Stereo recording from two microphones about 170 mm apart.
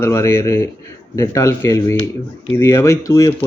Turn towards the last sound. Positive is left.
turn(degrees=20)  # may be behind; listen again after turning